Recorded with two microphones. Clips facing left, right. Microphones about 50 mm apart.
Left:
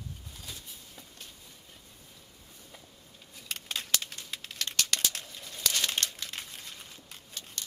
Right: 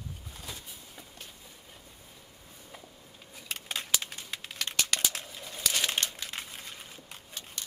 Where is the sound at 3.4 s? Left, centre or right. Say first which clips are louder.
Right 1 dB; centre.